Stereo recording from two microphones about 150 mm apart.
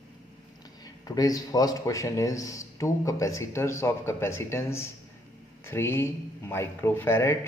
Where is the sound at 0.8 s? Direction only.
25° left (ahead or behind).